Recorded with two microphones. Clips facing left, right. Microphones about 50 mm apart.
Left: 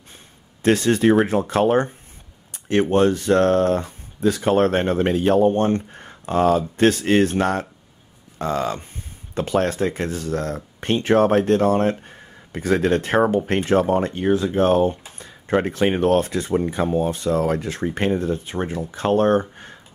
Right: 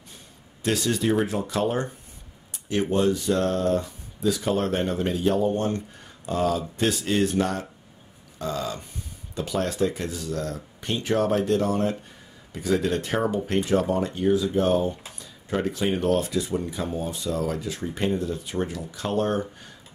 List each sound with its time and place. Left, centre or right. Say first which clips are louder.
0.6 s speech: left 7 dB; left